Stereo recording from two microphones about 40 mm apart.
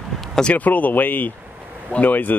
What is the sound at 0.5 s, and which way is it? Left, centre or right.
Speech, left.